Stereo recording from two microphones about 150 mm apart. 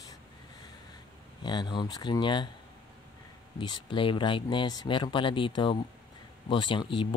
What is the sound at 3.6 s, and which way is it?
Speech, 30° left (ahead or behind).